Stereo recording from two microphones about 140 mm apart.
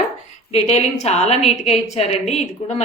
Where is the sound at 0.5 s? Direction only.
50° left (ahead or behind).